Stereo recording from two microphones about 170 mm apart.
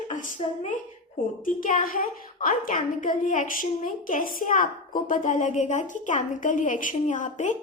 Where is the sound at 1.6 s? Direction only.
55° left (ahead or behind).